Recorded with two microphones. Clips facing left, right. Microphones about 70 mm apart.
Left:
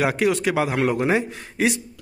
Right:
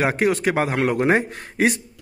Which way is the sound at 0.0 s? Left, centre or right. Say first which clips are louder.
Right 1 dB; right.